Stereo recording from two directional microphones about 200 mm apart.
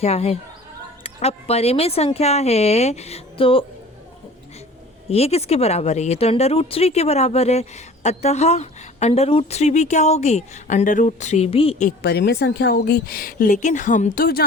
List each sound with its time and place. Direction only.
0.0 s speech: 30° left (ahead or behind)
5.0 s speech: 30° left (ahead or behind)
11.9 s a woman's voice: 55° left (ahead or behind)